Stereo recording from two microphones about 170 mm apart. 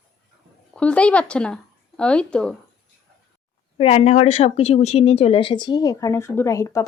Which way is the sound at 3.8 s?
35° left (ahead or behind).